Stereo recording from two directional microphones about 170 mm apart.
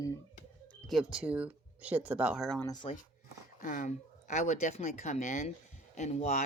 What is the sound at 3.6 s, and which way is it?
Speech, 50° left (ahead or behind).